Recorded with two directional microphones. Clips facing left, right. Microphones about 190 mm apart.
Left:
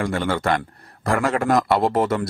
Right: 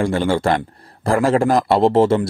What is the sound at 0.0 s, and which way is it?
Speech, 30° right (ahead or behind).